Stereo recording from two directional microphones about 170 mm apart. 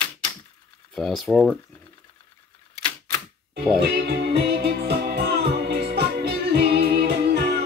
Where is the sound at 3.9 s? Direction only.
70° right (ahead or behind).